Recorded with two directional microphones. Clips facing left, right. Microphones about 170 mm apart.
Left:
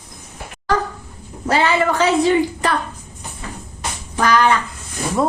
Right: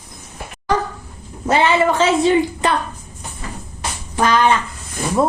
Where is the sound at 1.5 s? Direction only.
20° right (ahead or behind).